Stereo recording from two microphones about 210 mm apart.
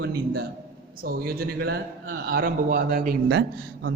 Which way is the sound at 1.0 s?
45° right (ahead or behind).